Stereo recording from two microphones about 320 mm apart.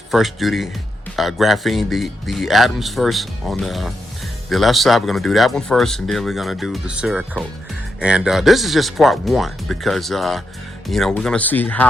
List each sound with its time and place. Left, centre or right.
0.1 s speech: centre